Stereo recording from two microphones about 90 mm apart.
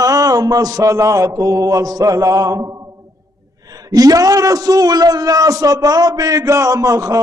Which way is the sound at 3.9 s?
45° right (ahead or behind).